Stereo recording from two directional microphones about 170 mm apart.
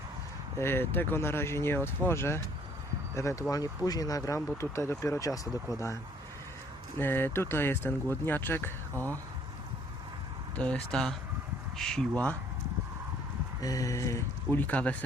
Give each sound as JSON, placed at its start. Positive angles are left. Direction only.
{"t": 0.6, "sound": "speech", "side_deg": 15}
{"t": 7.0, "sound": "speech", "side_deg": 15}
{"t": 10.6, "sound": "speech", "side_deg": 5}
{"t": 13.6, "sound": "speech", "side_deg": 20}